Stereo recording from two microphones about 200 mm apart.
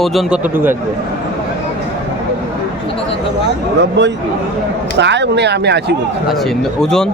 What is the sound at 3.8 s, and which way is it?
Speech, 60° right (ahead or behind).